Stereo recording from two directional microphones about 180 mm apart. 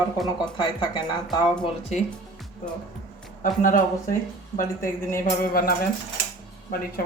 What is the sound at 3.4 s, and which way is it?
Speech, 45° left (ahead or behind).